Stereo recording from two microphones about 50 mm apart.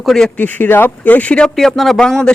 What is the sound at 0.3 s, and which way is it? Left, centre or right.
Speech, left.